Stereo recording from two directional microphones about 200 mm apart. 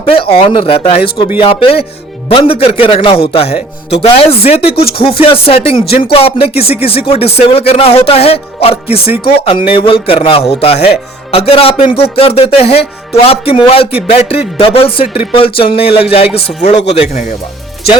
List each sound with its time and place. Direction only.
0.0 s speech: 30° left (ahead or behind)